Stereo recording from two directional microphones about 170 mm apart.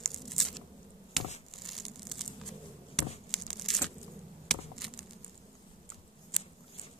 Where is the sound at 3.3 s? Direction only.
Centre (ahead or behind).